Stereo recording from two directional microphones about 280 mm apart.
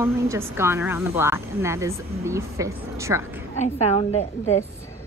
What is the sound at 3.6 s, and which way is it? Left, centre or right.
Speech, left.